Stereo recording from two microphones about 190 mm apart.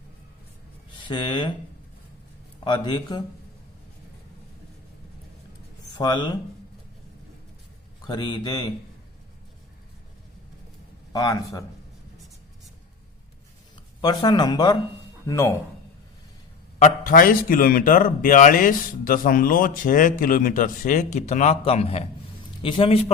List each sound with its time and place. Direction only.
1.0 s speech: 25° left (ahead or behind)
2.6 s speech: 25° left (ahead or behind)
5.8 s speech: 20° left (ahead or behind)
8.0 s speech: 25° left (ahead or behind)
11.1 s a man's voice: 20° left (ahead or behind)
14.0 s a man's voice: 20° left (ahead or behind)
16.8 s a man's voice: 45° left (ahead or behind); by 23.1 s 30° left (ahead or behind)